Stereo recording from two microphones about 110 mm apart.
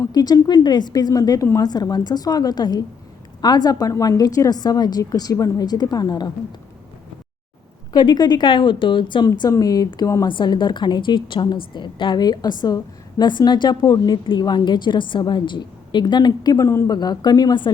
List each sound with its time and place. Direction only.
0.0 s a woman's voice: 35° left (ahead or behind)
7.9 s a woman's voice: 40° left (ahead or behind)
10.2 s a woman's voice: 45° left (ahead or behind); by 16.9 s 25° left (ahead or behind)
16.9 s a woman's voice: 40° left (ahead or behind)